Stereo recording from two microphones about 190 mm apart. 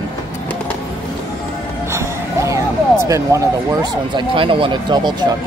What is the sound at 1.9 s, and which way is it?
Music, 15° right (ahead or behind).